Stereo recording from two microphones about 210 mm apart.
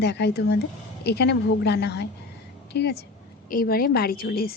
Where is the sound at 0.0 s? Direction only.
50° left (ahead or behind).